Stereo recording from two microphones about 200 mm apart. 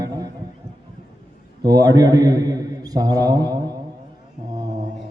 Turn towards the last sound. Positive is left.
turn(degrees=-20)  # may be behind; listen again after turning